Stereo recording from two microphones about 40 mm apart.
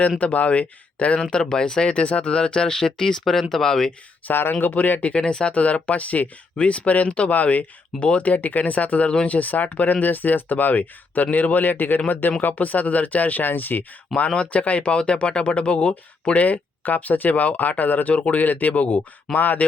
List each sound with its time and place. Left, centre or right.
0.2 s speech: left; by 3.9 s centre
4.3 s speech: left
5.2 s speech: left
5.5 s speech: left
13.4 s speech: left
14.3 s speech: left
16.3 s speech: left